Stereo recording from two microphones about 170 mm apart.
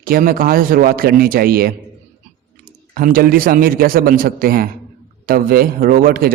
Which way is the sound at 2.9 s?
55° right (ahead or behind).